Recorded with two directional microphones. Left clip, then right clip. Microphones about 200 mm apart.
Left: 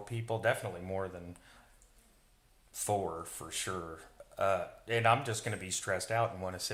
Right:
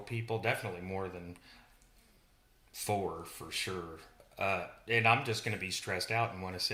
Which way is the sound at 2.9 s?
20° left (ahead or behind).